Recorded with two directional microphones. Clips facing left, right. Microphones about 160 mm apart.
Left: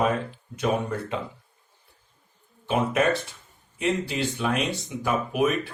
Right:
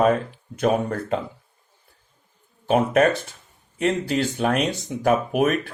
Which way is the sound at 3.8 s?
45° right (ahead or behind).